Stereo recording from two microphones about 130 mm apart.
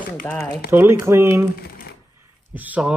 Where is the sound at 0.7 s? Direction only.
15° right (ahead or behind).